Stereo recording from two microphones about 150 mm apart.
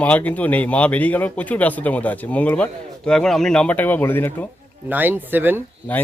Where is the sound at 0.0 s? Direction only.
10° left (ahead or behind).